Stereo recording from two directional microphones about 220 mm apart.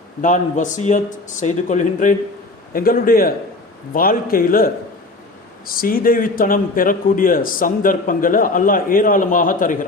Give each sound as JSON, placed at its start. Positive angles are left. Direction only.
{"t": 0.2, "sound": "a man's voice", "side_deg": 35}